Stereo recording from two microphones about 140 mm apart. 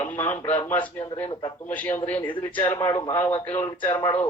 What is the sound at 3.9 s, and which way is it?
Speech, 35° left (ahead or behind).